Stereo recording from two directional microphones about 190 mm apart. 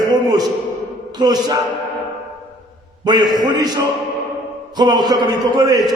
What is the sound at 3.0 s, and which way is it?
A man's voice, 20° right (ahead or behind).